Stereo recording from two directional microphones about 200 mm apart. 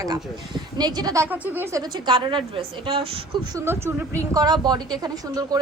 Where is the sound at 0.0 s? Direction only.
20° right (ahead or behind).